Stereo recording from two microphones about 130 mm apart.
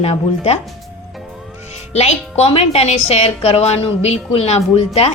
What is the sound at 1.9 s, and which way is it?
A woman's voice, 55° left (ahead or behind).